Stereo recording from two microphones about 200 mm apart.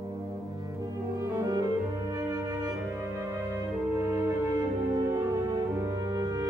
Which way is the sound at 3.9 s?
10° right (ahead or behind).